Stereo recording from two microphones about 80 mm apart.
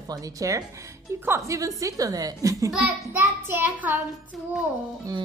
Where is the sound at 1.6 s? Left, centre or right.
Right.